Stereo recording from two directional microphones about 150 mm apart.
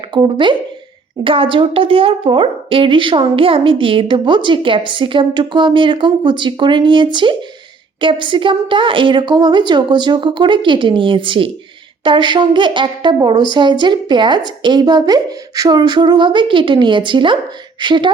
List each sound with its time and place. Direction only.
0.1 s a woman's voice: 35° right (ahead or behind)